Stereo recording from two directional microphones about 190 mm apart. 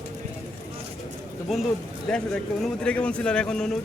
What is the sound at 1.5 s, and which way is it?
A man's voice, centre (ahead or behind).